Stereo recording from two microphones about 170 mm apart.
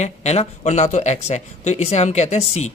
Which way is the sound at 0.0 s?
40° left (ahead or behind).